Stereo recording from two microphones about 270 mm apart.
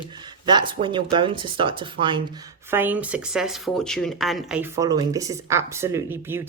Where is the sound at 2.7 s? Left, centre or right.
Centre.